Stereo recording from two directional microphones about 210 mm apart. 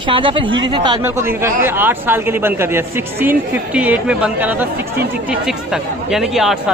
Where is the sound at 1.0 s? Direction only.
10° right (ahead or behind).